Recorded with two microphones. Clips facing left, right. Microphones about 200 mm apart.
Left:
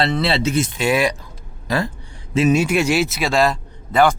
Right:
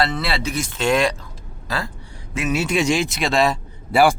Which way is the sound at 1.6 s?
20° left (ahead or behind).